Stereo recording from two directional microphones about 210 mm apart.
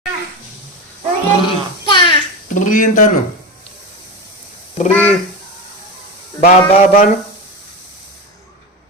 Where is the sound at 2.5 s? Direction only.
40° left (ahead or behind).